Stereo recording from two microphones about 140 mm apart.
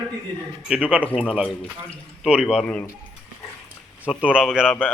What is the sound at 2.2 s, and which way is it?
Speech, 5° right (ahead or behind).